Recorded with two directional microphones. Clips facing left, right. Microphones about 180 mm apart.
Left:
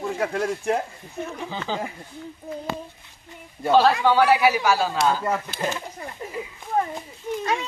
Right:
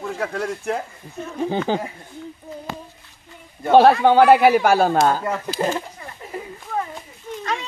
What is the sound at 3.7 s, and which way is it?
A man's voice, 55° right (ahead or behind).